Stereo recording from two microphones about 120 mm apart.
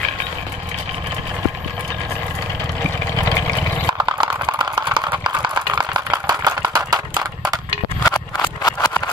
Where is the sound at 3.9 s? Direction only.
40° right (ahead or behind).